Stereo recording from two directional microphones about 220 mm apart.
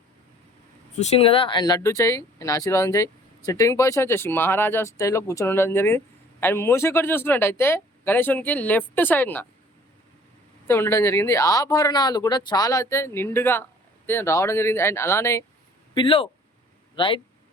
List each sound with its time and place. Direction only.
0.9 s speech: 30° left (ahead or behind); by 9.5 s 10° left (ahead or behind)
10.7 s speech: 10° left (ahead or behind)
16.0 s speech: 25° left (ahead or behind)